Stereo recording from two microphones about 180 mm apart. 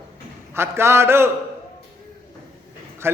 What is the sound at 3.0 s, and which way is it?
Speech, 15° right (ahead or behind).